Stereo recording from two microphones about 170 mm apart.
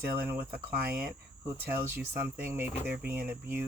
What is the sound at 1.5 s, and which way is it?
Speech, 15° right (ahead or behind).